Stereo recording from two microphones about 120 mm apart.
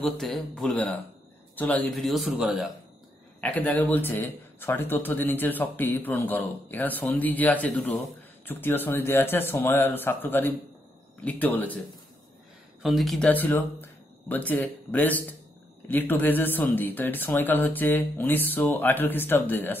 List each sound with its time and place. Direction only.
0.0 s speech: centre (ahead or behind)
2.0 s speech: centre (ahead or behind)
3.3 s speech: 10° left (ahead or behind)
12.8 s speech: centre (ahead or behind)
13.3 s speech: 15° left (ahead or behind)